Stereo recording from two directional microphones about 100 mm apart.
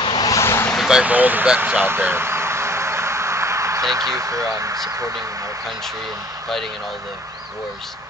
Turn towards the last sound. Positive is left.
turn(degrees=-35)  # may be behind; listen again after turning